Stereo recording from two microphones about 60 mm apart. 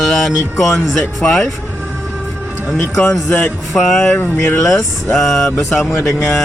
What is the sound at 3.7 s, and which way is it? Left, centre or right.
Speech, centre.